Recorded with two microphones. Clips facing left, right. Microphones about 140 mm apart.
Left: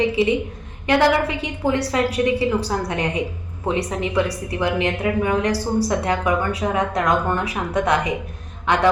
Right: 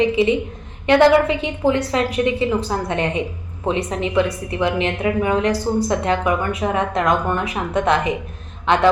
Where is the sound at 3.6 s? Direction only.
20° right (ahead or behind).